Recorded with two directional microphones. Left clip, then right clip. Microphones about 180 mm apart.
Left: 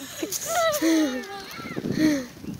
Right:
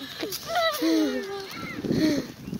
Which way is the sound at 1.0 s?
55° left (ahead or behind).